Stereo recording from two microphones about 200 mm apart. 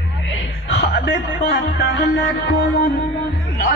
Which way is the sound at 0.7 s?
55° left (ahead or behind).